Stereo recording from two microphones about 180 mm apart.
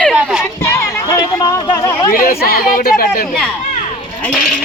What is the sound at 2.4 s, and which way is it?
Speech, 55° left (ahead or behind).